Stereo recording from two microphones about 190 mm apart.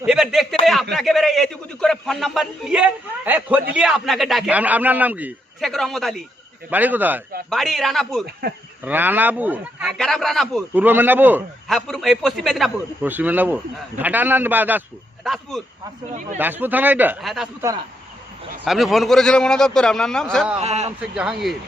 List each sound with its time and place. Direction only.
0.0 s a sound: 5° right (ahead or behind)
0.9 s a man's voice: centre (ahead or behind)
8.4 s speech: 55° right (ahead or behind)
8.8 s a man's voice: 10° right (ahead or behind)
10.0 s a man's voice: centre (ahead or behind)
10.8 s a man's voice: 10° right (ahead or behind)
11.7 s a man's voice: centre (ahead or behind)
16.4 s a man's voice: 10° right (ahead or behind)
18.6 s a man's voice: centre (ahead or behind)
20.6 s a man's voice: 35° right (ahead or behind)
21.0 s a man's voice: 5° right (ahead or behind)